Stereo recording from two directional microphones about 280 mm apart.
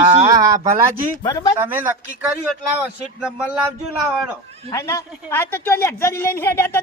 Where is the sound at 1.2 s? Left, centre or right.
Centre.